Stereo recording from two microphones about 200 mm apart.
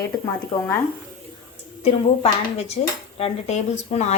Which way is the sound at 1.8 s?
30° left (ahead or behind).